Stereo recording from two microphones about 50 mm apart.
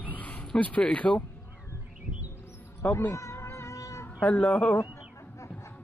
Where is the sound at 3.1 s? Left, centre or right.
Left.